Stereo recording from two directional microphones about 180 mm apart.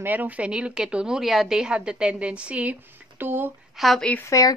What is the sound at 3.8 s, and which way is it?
Speech, centre (ahead or behind).